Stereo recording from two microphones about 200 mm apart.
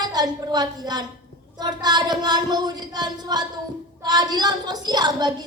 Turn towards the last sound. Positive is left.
turn(degrees=-20)  # may be behind; listen again after turning